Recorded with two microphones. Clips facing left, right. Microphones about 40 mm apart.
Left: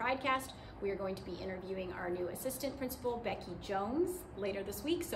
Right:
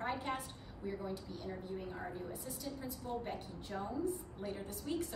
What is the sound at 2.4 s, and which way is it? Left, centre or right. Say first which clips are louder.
A woman's voice: left 5 dB; left.